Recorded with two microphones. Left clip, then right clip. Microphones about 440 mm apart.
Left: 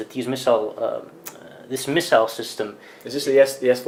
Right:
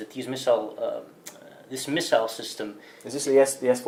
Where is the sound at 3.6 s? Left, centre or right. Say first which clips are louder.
Left 4 dB; right.